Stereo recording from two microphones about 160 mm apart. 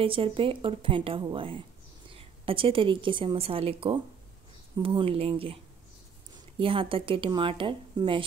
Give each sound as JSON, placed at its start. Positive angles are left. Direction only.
{"t": 0.0, "sound": "a woman's voice", "side_deg": -35}
{"t": 6.6, "sound": "speech", "side_deg": -35}